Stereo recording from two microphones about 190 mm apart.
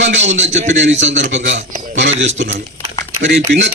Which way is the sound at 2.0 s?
75° right (ahead or behind).